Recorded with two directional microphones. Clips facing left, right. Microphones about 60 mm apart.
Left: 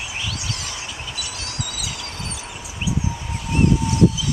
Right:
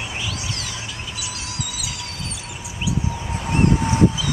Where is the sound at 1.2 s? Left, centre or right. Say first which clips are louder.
Even; centre.